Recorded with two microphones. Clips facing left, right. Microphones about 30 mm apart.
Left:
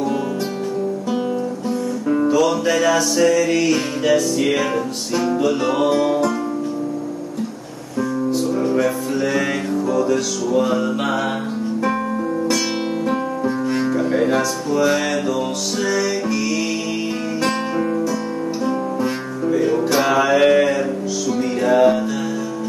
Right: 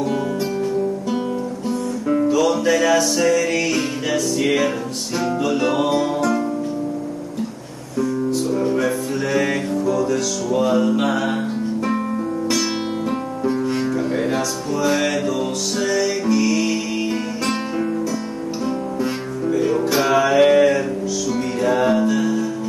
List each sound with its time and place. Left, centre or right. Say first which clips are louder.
2.1 s music: left 1 dB; centre
8.3 s music: left 1 dB; centre
11.9 s music: left 1 dB; centre
17.6 s music: left 2 dB; centre
18.9 s music: left 1 dB; centre